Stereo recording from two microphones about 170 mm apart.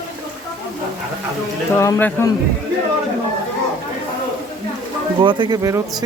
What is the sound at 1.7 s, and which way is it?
Speech, 15° left (ahead or behind).